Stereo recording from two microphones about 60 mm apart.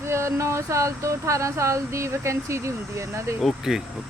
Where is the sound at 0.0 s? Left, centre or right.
Right.